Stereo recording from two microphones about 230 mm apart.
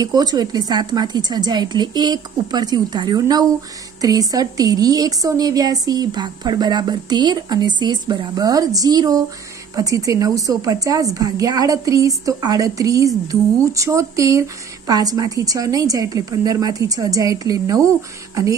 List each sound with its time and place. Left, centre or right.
0.0 s speech: centre